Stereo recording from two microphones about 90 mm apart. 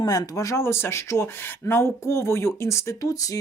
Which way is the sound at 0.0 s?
40° left (ahead or behind).